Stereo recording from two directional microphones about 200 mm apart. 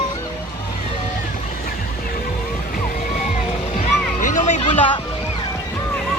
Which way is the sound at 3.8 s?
40° left (ahead or behind).